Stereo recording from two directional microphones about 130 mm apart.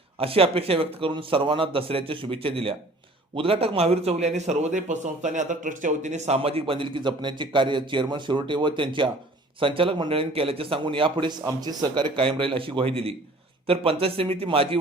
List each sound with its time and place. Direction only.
0.2 s a man's voice: 45° right (ahead or behind)